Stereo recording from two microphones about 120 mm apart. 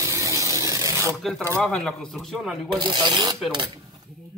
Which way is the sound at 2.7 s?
40° right (ahead or behind).